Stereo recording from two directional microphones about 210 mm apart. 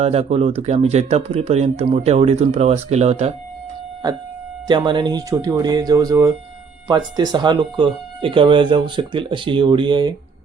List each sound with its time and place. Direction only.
0.0 s speech: 30° right (ahead or behind)
4.7 s speech: 20° right (ahead or behind)